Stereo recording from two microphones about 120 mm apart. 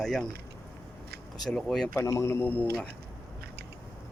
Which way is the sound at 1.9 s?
25° left (ahead or behind).